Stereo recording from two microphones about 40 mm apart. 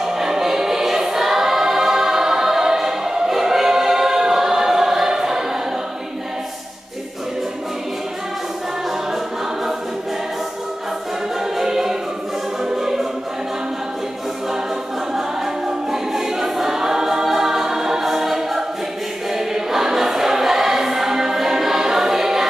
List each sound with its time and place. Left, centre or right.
0.0 s choir: centre
11.5 s music: centre
12.7 s choir: centre
15.1 s choir: centre